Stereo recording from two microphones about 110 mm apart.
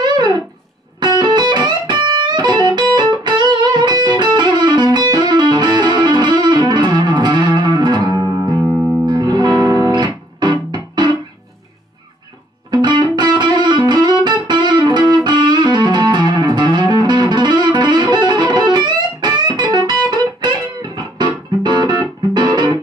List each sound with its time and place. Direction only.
0.0 s music: 40° right (ahead or behind)
12.7 s music: 40° right (ahead or behind)